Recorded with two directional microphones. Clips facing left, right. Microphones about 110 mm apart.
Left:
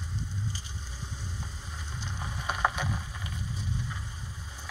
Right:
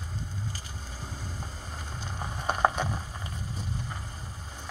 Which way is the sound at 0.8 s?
45° right (ahead or behind).